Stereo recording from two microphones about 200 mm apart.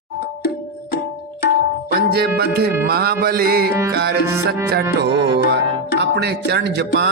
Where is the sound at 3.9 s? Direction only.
55° right (ahead or behind).